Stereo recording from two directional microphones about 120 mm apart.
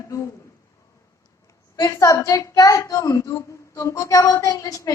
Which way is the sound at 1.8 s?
25° left (ahead or behind).